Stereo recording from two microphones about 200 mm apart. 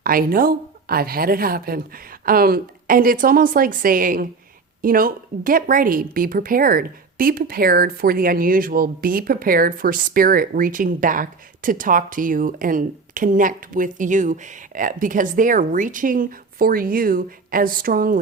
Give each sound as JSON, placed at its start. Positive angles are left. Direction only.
{"t": 0.0, "sound": "a woman's voice", "side_deg": -45}